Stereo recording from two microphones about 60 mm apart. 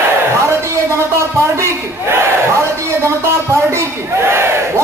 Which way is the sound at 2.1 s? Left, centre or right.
Right.